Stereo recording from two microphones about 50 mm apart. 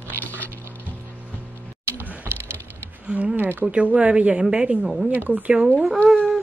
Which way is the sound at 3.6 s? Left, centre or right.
Right.